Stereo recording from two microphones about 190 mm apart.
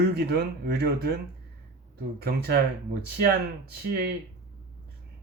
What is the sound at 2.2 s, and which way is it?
Speech, 55° right (ahead or behind).